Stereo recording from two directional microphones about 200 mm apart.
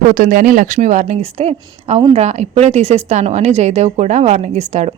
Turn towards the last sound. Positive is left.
turn(degrees=-35)  # may be behind; listen again after turning